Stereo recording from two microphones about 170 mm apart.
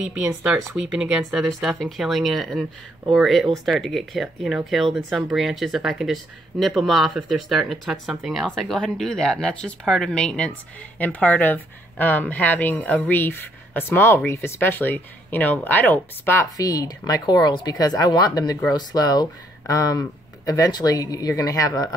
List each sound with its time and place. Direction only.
0.0 s speech: 5° right (ahead or behind); by 21.9 s 20° left (ahead or behind)